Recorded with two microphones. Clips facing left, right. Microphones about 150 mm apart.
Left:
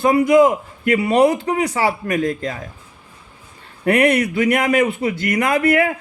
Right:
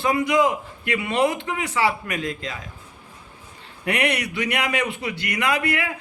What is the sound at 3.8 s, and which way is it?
A man's voice, 50° left (ahead or behind).